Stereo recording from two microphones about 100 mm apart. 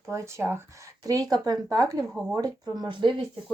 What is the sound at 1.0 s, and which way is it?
Speech, 40° right (ahead or behind).